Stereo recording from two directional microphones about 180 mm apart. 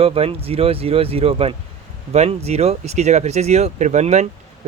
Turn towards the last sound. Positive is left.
turn(degrees=-40)  # may be behind; listen again after turning